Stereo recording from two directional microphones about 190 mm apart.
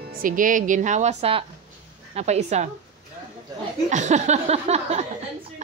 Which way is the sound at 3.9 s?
40° right (ahead or behind).